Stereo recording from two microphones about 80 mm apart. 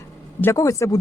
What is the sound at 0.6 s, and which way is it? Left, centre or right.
Speech, left.